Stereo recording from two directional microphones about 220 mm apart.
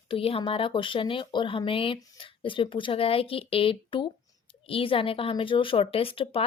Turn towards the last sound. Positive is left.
turn(degrees=25)  # may be behind; listen again after turning